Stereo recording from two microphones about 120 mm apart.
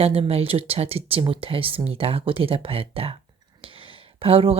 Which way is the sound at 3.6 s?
45° right (ahead or behind).